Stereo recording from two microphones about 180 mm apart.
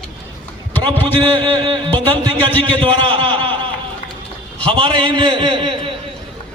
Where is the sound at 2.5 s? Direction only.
10° left (ahead or behind).